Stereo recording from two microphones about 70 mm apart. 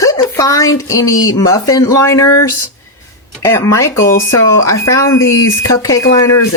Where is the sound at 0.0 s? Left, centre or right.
Left.